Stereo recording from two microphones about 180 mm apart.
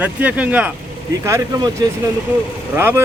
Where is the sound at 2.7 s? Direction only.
15° right (ahead or behind).